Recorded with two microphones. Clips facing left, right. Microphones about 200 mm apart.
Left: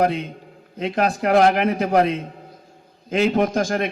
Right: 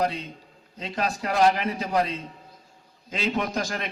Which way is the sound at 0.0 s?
55° left (ahead or behind).